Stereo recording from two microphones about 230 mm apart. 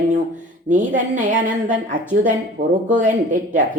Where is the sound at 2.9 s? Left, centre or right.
Right.